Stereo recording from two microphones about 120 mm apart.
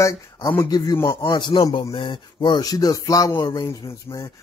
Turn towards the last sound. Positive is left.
turn(degrees=25)  # may be behind; listen again after turning